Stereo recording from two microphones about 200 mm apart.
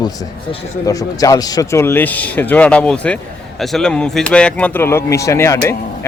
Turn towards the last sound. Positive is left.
turn(degrees=15)  # may be behind; listen again after turning